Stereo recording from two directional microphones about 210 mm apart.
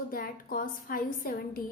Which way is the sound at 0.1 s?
45° left (ahead or behind).